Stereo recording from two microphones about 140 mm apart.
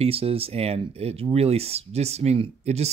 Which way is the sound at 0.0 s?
45° right (ahead or behind).